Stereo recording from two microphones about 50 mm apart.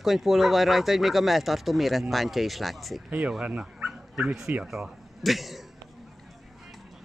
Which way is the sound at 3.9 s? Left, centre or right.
Centre.